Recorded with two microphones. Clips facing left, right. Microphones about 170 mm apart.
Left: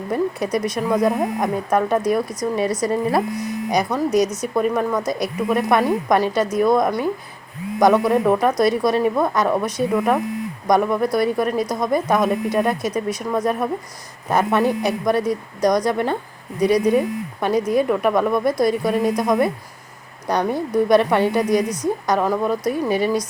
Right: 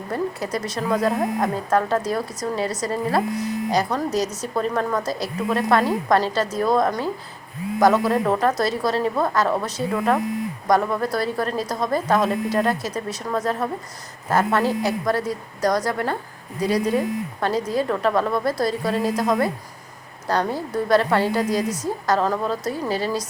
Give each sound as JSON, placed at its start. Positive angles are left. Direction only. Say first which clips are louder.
{"t": 0.1, "sound": "a woman's voice", "louder": "left 4 dB", "side_deg": 15}